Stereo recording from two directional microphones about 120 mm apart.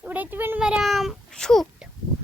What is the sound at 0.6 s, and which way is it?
A child's voice, 5° right (ahead or behind).